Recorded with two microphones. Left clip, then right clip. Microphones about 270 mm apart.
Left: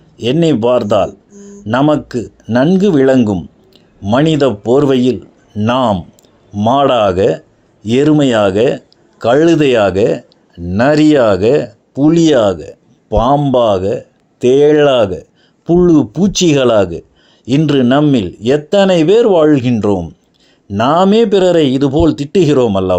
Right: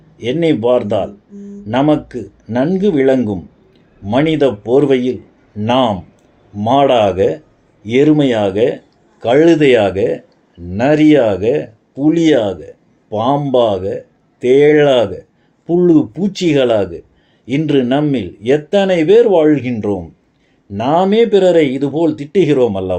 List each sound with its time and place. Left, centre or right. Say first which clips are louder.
0.4 s speech: even; left
7.2 s a sound: left 2 dB; left
7.9 s speech: even; left
8.3 s speech: left 3 dB; left